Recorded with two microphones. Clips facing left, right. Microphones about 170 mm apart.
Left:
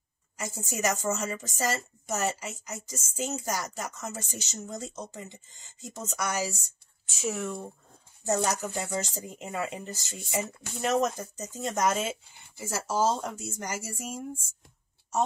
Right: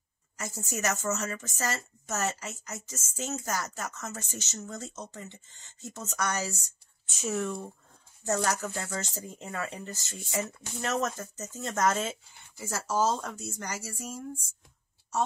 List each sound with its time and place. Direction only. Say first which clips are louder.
0.4 s a woman's voice: left 2 dB; 15° left (ahead or behind)